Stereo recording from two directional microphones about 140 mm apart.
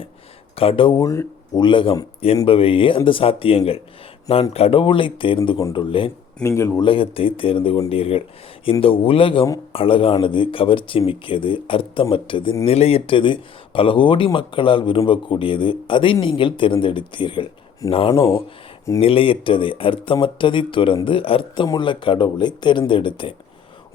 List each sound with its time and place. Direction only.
0.5 s speech: 45° left (ahead or behind)
1.0 s speech: 25° left (ahead or behind)
1.6 s speech: 35° left (ahead or behind)
6.4 s speech: 20° left (ahead or behind)
6.8 s speech: 40° left (ahead or behind)
17.8 s speech: 25° left (ahead or behind)
18.2 s speech: 40° left (ahead or behind)